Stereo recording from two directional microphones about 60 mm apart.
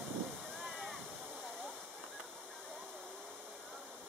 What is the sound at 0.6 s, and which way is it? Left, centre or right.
Waterfall, centre.